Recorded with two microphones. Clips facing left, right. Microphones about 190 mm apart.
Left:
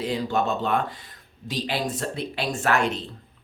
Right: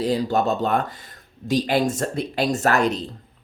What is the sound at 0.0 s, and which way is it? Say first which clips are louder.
Speech: right 4 dB; 40° right (ahead or behind).